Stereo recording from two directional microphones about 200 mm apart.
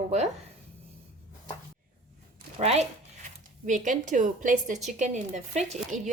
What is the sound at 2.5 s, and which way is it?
Speech, 30° right (ahead or behind).